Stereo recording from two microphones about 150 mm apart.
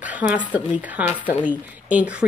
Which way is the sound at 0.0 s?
10° right (ahead or behind).